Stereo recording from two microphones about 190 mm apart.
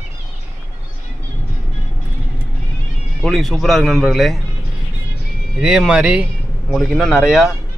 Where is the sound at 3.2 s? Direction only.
Centre (ahead or behind).